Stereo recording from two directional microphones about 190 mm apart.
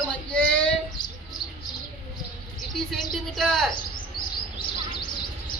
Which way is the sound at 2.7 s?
Centre (ahead or behind).